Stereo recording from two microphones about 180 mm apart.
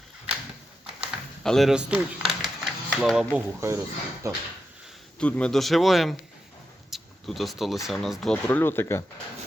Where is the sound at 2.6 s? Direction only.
Centre (ahead or behind).